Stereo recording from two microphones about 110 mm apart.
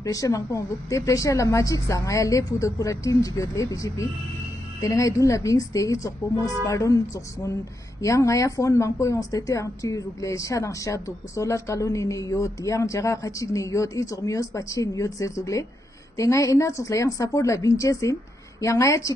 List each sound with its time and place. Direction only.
0.0 s a woman's voice: 30° left (ahead or behind)
8.0 s speech: 30° left (ahead or behind)